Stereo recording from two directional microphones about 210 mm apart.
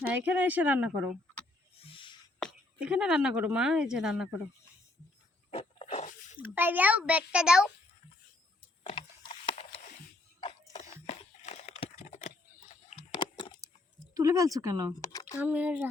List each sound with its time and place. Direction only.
0.0 s a child's voice: 5° right (ahead or behind)
1.8 s owl: 25° left (ahead or behind)
2.4 s speech: 5° right (ahead or behind)
5.5 s a sound: 30° left (ahead or behind)
6.3 s a child's voice: 10° right (ahead or behind)
8.8 s a sound: 25° left (ahead or behind)
14.1 s a child's voice: 15° right (ahead or behind)
15.0 s a sound: 15° left (ahead or behind)
15.4 s a child's voice: 5° right (ahead or behind)